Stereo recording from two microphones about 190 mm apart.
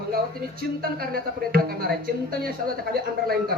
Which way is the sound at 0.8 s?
50° right (ahead or behind).